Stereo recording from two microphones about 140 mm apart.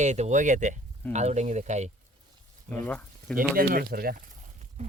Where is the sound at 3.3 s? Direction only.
90° right.